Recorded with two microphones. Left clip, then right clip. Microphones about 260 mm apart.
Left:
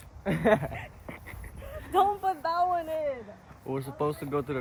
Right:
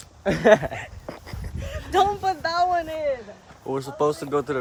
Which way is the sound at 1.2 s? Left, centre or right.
Right.